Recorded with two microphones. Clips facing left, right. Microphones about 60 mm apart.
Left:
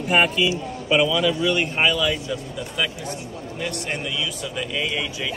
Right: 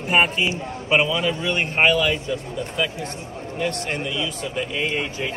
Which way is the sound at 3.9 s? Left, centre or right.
Right.